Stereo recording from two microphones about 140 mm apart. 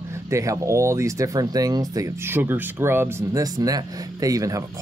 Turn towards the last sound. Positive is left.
turn(degrees=-25)  # may be behind; listen again after turning